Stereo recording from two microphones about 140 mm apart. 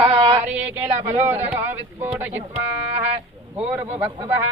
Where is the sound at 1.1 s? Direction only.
15° right (ahead or behind).